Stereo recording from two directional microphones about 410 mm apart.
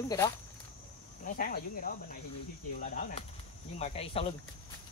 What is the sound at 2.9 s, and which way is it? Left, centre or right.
Speech, centre.